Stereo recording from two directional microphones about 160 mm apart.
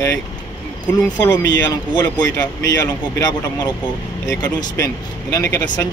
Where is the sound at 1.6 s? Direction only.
25° left (ahead or behind).